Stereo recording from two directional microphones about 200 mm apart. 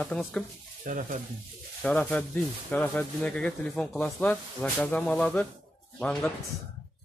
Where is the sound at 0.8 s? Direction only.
40° right (ahead or behind).